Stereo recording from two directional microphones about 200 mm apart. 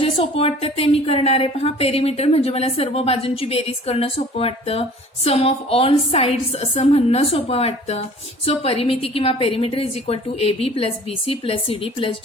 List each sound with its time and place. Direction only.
0.0 s a woman's voice: 30° left (ahead or behind)